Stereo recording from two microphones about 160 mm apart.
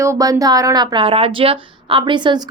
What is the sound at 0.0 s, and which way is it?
A woman's voice, 20° right (ahead or behind).